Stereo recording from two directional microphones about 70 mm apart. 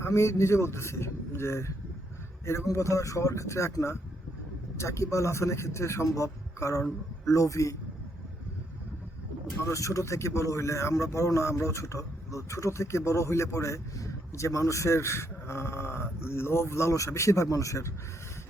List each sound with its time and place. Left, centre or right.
0.0 s a man's voice: left
9.6 s a man's voice: left